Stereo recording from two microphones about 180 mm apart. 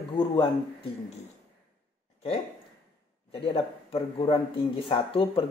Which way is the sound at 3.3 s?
30° left (ahead or behind).